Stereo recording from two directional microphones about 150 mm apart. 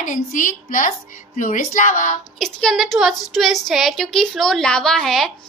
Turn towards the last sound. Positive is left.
turn(degrees=0)  # may be behind; listen again after turning